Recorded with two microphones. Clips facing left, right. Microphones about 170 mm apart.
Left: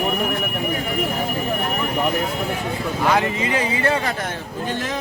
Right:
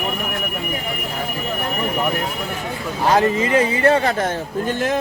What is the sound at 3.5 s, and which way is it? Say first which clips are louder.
Speech: right 5 dB; 35° right (ahead or behind).